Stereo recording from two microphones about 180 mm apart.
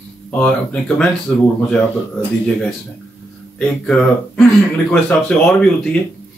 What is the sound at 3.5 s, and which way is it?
Speech, 5° left (ahead or behind).